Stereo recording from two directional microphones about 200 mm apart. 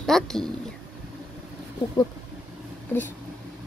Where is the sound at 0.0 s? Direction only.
Centre (ahead or behind).